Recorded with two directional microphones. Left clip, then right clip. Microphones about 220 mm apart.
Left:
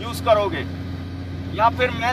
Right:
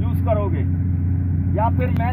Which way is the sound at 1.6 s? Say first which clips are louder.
Left 5 dB; centre (ahead or behind).